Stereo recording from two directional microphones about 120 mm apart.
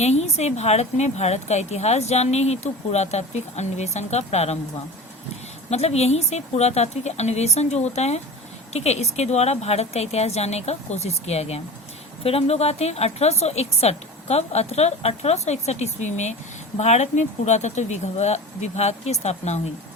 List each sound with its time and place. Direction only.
0.0 s a woman's voice: 65° left (ahead or behind)
5.7 s a woman's voice: 65° left (ahead or behind)